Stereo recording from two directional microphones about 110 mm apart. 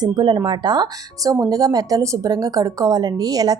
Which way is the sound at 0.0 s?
40° right (ahead or behind).